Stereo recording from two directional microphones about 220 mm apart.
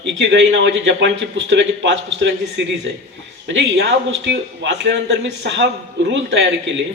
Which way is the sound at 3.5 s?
55° right (ahead or behind).